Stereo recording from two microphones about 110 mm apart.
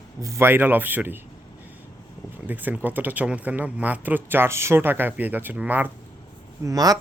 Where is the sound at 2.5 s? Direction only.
15° right (ahead or behind).